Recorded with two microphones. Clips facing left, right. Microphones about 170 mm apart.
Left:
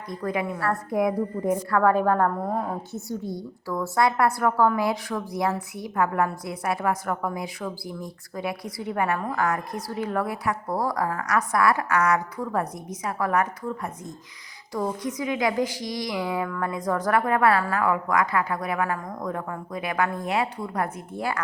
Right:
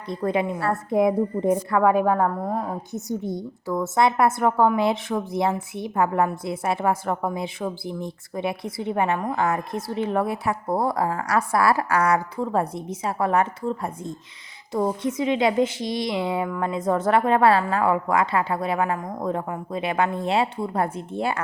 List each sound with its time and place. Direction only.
0.1 s a woman's voice: 25° right (ahead or behind); by 2.6 s centre (ahead or behind)
2.9 s a woman's voice: 20° right (ahead or behind)